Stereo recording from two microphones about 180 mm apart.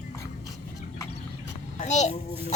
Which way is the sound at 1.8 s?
40° left (ahead or behind).